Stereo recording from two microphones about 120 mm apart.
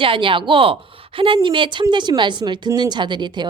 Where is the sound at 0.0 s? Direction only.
45° right (ahead or behind).